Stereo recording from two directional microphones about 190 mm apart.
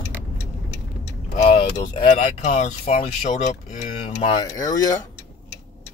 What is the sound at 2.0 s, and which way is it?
Speech, 30° left (ahead or behind).